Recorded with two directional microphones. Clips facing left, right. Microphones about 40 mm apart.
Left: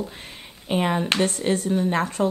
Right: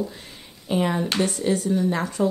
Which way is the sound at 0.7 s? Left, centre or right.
Left.